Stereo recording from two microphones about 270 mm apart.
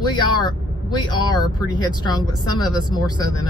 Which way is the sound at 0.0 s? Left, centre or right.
Centre.